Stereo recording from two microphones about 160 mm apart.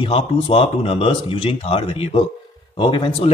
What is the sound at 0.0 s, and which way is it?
Speech, 35° left (ahead or behind).